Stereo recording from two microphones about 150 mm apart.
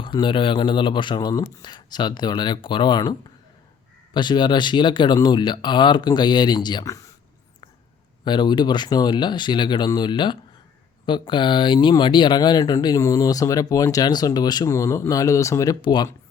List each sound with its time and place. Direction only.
0.0 s speech: 30° left (ahead or behind)
8.2 s speech: 30° left (ahead or behind)